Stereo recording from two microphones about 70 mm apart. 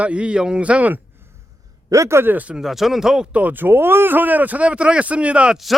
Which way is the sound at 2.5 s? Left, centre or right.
Centre.